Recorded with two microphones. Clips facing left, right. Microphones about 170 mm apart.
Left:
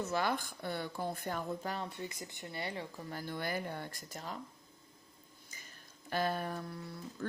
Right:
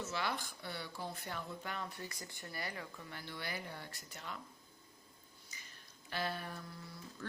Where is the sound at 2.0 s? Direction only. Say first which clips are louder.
Left 5 dB; 20° left (ahead or behind); by 4.4 s 40° left (ahead or behind).